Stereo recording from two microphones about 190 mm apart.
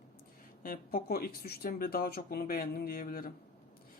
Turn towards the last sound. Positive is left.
turn(degrees=50)  # may be behind; listen again after turning